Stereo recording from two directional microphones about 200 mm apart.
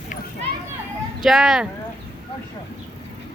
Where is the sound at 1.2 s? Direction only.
Centre (ahead or behind).